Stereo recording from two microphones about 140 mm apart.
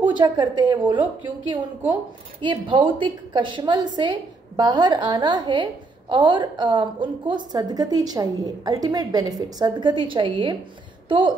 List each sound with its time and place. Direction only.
0.2 s a woman's voice: 30° right (ahead or behind)
0.9 s a woman's voice: 10° right (ahead or behind)
2.4 s a woman's voice: 35° right (ahead or behind)